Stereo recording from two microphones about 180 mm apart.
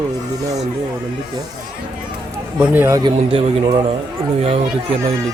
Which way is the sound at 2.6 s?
10° right (ahead or behind).